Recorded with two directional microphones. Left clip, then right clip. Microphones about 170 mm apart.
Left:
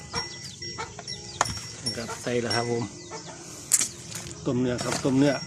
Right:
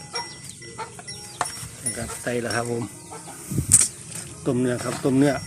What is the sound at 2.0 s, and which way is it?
Speech, centre (ahead or behind).